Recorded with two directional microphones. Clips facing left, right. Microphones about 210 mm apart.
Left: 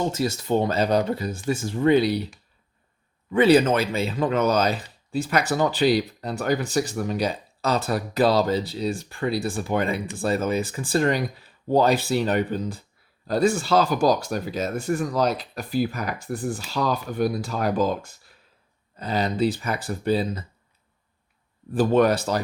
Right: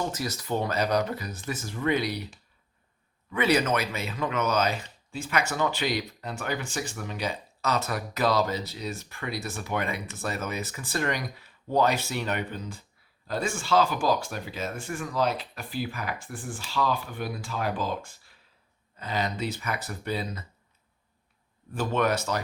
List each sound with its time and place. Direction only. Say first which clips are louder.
0.0 s speech: left 7 dB; 25° left (ahead or behind)
21.7 s speech: left 7 dB; 35° left (ahead or behind)